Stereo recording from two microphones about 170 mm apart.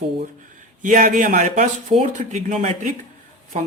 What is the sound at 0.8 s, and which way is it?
Speech, 50° right (ahead or behind).